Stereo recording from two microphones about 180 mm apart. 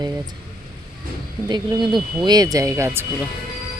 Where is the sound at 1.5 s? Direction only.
25° right (ahead or behind).